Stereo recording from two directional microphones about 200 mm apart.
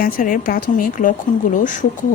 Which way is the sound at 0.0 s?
45° left (ahead or behind).